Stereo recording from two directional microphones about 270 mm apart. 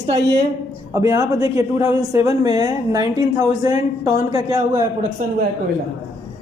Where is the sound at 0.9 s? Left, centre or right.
Centre.